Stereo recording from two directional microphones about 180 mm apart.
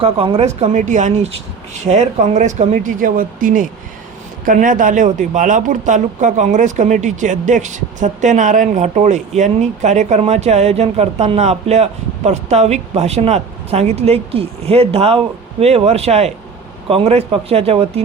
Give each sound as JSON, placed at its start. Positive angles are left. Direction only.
{"t": 0.0, "sound": "speech", "side_deg": -30}